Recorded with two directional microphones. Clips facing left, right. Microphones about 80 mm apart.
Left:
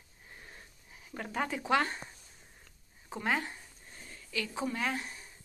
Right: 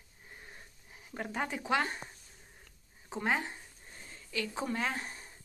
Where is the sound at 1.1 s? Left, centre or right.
Right.